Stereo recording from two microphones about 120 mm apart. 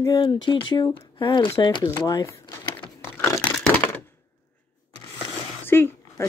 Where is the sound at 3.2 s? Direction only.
20° left (ahead or behind).